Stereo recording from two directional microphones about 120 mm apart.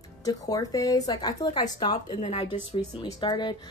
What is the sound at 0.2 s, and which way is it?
A woman's voice, 30° left (ahead or behind).